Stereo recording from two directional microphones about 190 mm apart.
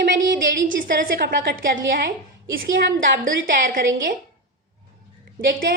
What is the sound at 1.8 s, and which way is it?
Speech, 70° right (ahead or behind).